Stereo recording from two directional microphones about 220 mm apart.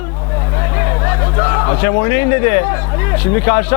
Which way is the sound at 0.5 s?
15° left (ahead or behind).